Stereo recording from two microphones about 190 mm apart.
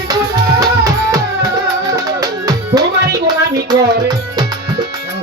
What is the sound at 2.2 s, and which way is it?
Music, 20° right (ahead or behind).